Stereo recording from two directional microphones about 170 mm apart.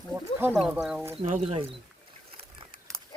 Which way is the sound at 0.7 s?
5° right (ahead or behind).